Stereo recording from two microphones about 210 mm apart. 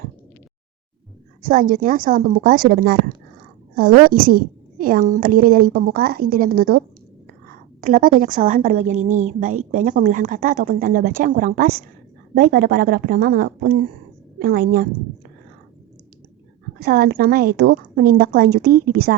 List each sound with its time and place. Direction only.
1.4 s a woman's voice: 40° right (ahead or behind)
16.8 s a woman's voice: 45° right (ahead or behind)